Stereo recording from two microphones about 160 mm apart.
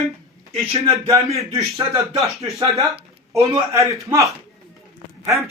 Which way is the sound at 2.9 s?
40° right (ahead or behind).